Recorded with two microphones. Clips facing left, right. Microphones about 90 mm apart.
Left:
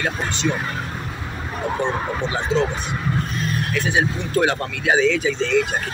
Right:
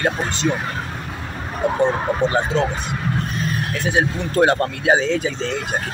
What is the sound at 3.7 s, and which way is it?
Speech, 40° right (ahead or behind).